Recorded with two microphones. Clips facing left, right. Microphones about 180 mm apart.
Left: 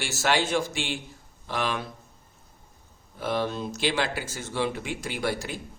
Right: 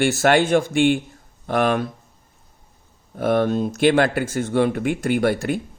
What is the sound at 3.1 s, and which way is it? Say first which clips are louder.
Speech: right 9 dB; 55° right (ahead or behind).